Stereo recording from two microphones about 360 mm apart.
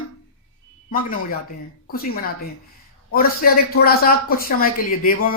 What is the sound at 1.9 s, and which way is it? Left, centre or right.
Speech, left.